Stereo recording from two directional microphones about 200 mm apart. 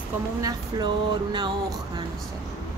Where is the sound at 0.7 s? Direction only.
20° right (ahead or behind).